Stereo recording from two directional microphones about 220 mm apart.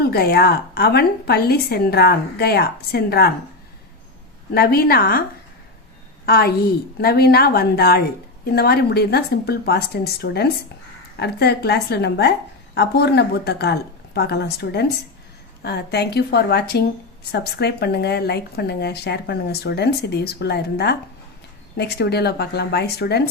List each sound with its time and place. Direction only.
0.0 s speech: 45° left (ahead or behind)
4.5 s speech: 45° left (ahead or behind)
6.2 s speech: 45° left (ahead or behind)